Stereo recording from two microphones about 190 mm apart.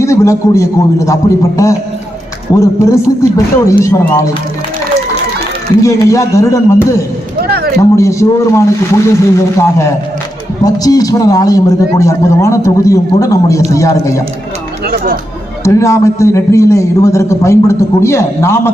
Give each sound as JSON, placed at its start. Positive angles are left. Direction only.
{"t": 0.0, "sound": "a man's voice", "side_deg": 15}
{"t": 5.8, "sound": "a man's voice", "side_deg": 15}
{"t": 7.4, "sound": "a sound", "side_deg": -55}
{"t": 7.8, "sound": "a man's voice", "side_deg": 15}
{"t": 14.8, "sound": "speech", "side_deg": -50}
{"t": 15.6, "sound": "a man's voice", "side_deg": 15}